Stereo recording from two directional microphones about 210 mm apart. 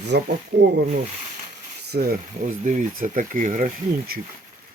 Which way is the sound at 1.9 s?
45° right (ahead or behind).